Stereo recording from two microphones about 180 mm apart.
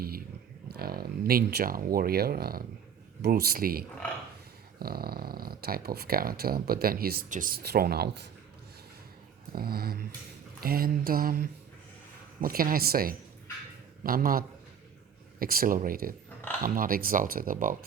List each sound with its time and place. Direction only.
0.7 s speech: 60° right (ahead or behind)
9.5 s speech: 55° right (ahead or behind)